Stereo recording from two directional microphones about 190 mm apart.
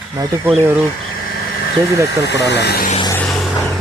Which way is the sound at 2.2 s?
65° left (ahead or behind).